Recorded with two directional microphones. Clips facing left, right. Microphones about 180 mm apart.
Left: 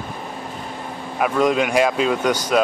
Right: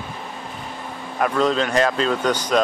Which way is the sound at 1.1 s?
5° left (ahead or behind).